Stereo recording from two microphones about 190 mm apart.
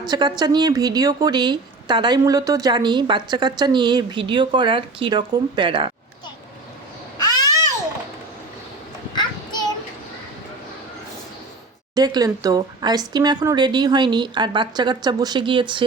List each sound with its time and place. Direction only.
0.0 s speech: 20° right (ahead or behind)
7.2 s babbling: 20° left (ahead or behind)
9.1 s child singing: 20° left (ahead or behind)
11.9 s speech: 20° right (ahead or behind)